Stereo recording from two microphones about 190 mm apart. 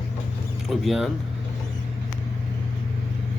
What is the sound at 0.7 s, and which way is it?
Speech, centre (ahead or behind).